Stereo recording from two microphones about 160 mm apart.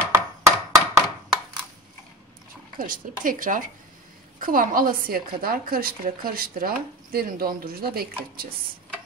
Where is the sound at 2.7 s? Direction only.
55° right (ahead or behind).